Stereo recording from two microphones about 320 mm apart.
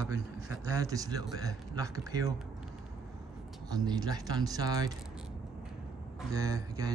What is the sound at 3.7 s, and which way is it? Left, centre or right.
Speech, centre.